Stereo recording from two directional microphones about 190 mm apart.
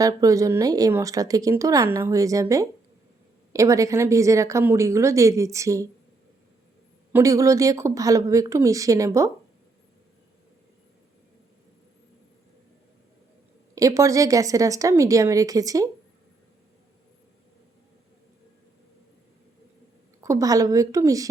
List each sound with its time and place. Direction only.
0.0 s speech: 20° right (ahead or behind)
7.1 s speech: 15° right (ahead or behind)
13.7 s speech: 15° right (ahead or behind)
20.2 s speech: 15° right (ahead or behind)